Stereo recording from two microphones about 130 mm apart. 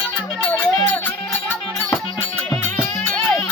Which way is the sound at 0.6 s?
10° left (ahead or behind).